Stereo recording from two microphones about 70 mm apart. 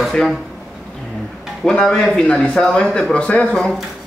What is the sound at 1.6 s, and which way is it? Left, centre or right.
A man's voice, centre.